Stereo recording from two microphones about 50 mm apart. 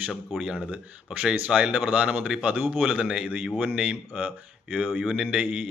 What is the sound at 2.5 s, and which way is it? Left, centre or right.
Speech, right.